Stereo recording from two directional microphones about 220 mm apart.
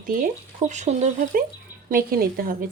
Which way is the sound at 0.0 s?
40° right (ahead or behind).